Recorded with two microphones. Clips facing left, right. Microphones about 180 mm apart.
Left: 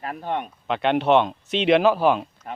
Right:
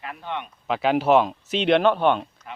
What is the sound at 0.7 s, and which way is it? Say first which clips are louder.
Speech: even; centre (ahead or behind).